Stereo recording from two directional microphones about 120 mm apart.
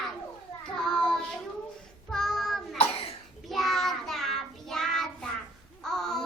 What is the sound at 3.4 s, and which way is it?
Child singing, centre (ahead or behind).